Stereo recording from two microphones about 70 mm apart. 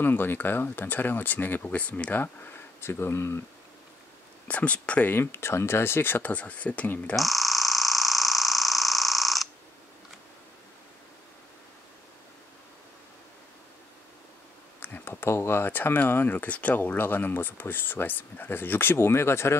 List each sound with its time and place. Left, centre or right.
0.0 s speech: left
4.5 s speech: centre
5.1 s speech: left
7.2 s a sound: centre
14.8 s speech: left